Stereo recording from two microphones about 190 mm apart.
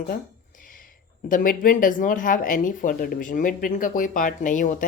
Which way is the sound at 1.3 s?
45° left (ahead or behind).